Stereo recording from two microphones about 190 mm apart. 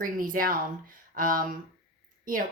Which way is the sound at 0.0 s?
45° right (ahead or behind).